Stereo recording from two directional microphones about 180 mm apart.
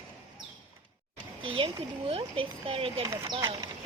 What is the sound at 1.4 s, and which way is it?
A child's voice, 30° right (ahead or behind).